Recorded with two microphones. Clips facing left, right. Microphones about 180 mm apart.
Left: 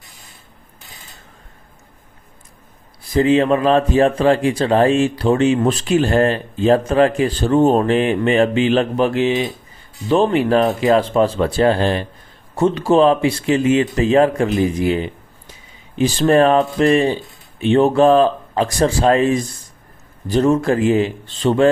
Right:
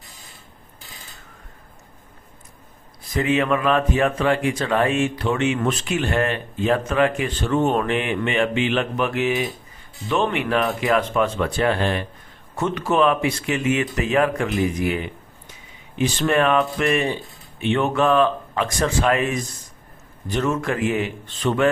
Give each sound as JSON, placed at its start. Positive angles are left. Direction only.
{"t": 3.1, "sound": "speech", "side_deg": 30}